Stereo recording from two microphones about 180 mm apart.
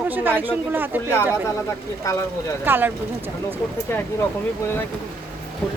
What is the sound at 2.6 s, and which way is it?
Speech, 10° right (ahead or behind).